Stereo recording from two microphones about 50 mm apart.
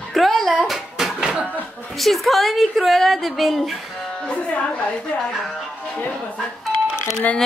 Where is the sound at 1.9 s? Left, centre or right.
Centre.